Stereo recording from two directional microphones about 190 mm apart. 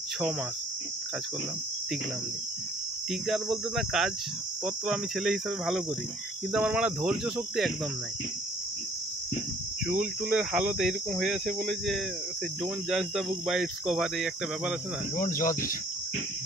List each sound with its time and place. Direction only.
3.1 s speech: centre (ahead or behind)
9.8 s speech: 5° right (ahead or behind)
15.1 s speech: 45° left (ahead or behind)